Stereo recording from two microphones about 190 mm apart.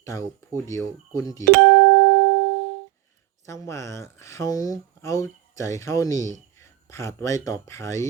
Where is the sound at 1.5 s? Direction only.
65° right (ahead or behind).